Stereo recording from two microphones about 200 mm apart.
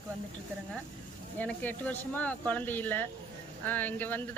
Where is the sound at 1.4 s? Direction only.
10° left (ahead or behind).